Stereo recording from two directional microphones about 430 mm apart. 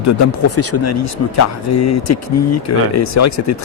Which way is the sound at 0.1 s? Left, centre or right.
Left.